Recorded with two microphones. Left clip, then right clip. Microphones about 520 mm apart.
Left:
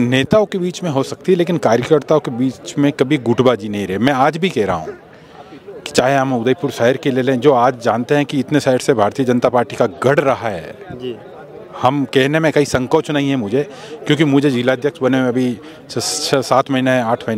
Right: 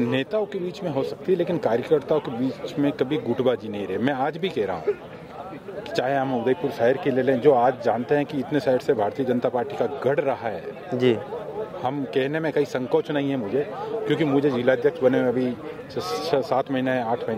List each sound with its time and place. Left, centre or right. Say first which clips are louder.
0.0 s a man's voice: left 10 dB; left
5.9 s a man's voice: left 9 dB; left
11.8 s a man's voice: left 12 dB; left